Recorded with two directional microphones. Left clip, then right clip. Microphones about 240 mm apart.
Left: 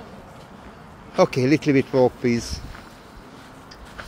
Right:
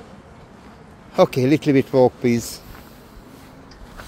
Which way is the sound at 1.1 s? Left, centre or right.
Centre.